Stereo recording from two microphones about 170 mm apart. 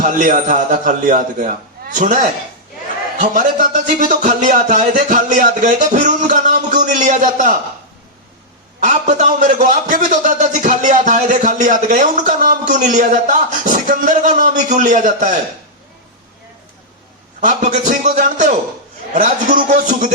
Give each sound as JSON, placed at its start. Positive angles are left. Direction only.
{"t": 0.0, "sound": "a man's voice", "side_deg": -50}
{"t": 8.8, "sound": "a man's voice", "side_deg": -45}
{"t": 17.4, "sound": "a man's voice", "side_deg": -45}